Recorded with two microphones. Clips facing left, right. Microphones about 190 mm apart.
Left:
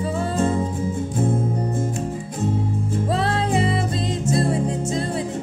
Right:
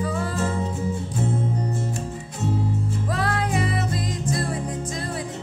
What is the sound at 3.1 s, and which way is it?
Music, 25° left (ahead or behind).